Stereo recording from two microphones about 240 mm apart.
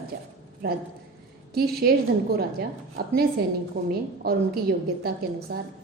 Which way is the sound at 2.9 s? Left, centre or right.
Right.